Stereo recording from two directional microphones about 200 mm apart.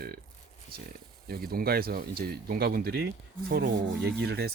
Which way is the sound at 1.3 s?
50° right (ahead or behind).